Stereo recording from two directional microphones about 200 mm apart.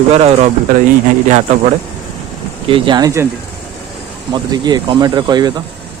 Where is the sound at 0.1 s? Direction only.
30° right (ahead or behind).